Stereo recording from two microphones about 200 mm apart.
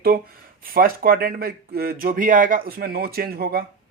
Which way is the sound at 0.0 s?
45° right (ahead or behind).